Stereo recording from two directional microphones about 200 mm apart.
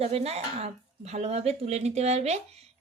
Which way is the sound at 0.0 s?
30° right (ahead or behind).